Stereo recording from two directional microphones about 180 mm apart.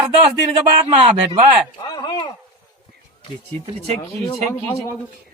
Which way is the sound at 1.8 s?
20° left (ahead or behind).